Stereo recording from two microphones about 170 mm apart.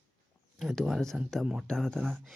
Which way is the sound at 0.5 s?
Centre (ahead or behind).